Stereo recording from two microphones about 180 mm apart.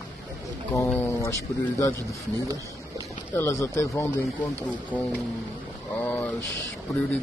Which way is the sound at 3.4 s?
15° left (ahead or behind).